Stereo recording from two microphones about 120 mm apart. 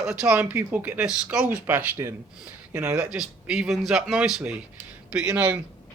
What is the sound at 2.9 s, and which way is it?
Speech, 10° right (ahead or behind).